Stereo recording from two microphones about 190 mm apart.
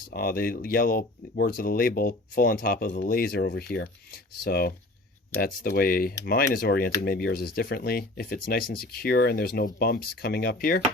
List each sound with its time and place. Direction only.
0.1 s speech: 50° left (ahead or behind)